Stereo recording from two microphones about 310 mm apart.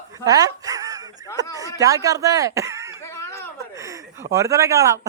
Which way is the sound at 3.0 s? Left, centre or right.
Centre.